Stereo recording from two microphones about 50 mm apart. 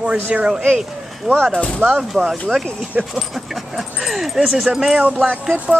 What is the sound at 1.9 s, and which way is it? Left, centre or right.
Speech, right.